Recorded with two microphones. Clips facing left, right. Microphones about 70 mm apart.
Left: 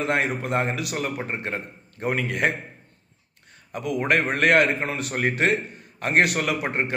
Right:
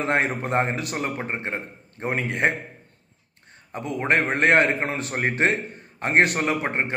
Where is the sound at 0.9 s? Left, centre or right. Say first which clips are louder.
Even; right.